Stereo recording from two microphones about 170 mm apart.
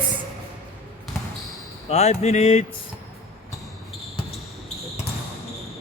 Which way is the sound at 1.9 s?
40° left (ahead or behind).